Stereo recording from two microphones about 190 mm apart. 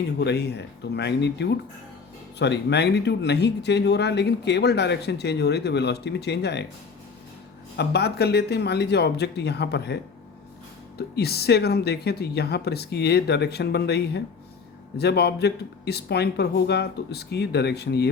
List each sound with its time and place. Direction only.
0.2 s speech: 60° left (ahead or behind)
7.8 s speech: 60° left (ahead or behind)